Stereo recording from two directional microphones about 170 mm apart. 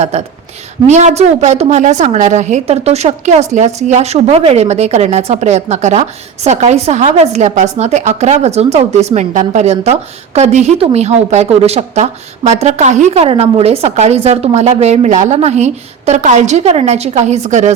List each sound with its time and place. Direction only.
0.1 s a woman's voice: 40° right (ahead or behind)